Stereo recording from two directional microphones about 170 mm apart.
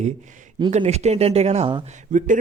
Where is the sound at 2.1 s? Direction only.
45° right (ahead or behind).